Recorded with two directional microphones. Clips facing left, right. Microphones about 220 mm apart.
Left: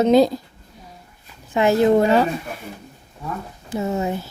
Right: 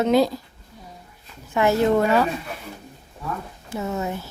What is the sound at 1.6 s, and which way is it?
Speech, 20° left (ahead or behind).